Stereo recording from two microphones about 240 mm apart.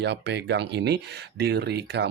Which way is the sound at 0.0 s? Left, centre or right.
Right.